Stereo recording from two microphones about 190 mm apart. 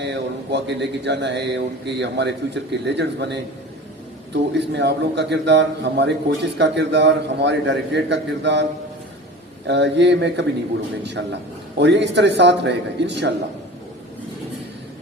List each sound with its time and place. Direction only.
0.0 s speech: 65° right (ahead or behind)
9.6 s speech: 65° right (ahead or behind)